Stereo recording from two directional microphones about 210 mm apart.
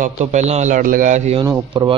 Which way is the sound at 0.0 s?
35° right (ahead or behind).